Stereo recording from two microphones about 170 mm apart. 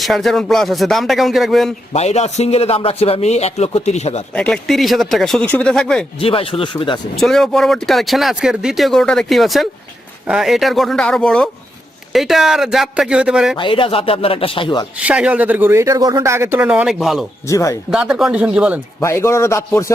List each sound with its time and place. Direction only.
0.0 s speech: centre (ahead or behind)
1.9 s a man's voice: 40° left (ahead or behind)
4.4 s speech: 5° left (ahead or behind)
6.1 s a man's voice: 35° left (ahead or behind)
7.2 s speech: centre (ahead or behind)
13.6 s a man's voice: 30° left (ahead or behind)
15.0 s speech: 5° right (ahead or behind)
17.5 s speech: 20° left (ahead or behind)
17.9 s speech: 5° right (ahead or behind)
18.9 s a man's voice: 15° left (ahead or behind)